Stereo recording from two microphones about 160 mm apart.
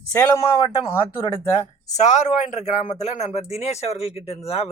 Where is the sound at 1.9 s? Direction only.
50° left (ahead or behind).